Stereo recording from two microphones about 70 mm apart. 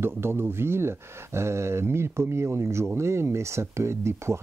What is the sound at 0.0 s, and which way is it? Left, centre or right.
Speech, right.